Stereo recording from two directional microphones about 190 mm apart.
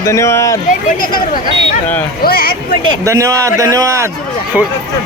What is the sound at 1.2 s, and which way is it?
Speech, 50° left (ahead or behind).